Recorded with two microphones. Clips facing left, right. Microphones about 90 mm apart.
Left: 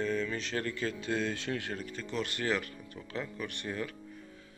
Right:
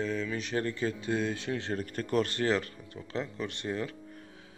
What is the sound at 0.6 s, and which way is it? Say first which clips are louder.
Speech: right 3 dB; 25° right (ahead or behind).